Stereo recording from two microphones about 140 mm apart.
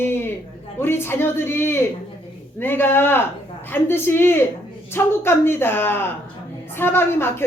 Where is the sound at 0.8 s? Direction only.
15° left (ahead or behind).